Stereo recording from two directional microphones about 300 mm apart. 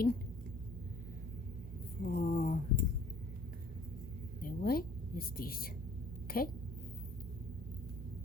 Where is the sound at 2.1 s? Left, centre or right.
Left.